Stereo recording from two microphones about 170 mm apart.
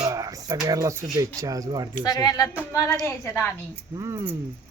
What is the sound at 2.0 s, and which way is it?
A woman's voice, 20° left (ahead or behind).